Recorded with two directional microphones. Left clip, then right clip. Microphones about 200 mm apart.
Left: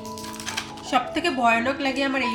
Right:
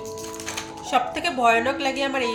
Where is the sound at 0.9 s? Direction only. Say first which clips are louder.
Even; 10° right (ahead or behind).